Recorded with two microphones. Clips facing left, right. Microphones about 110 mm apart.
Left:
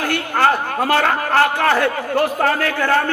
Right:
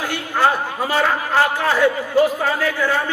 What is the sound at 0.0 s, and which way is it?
A man's voice, 65° left (ahead or behind).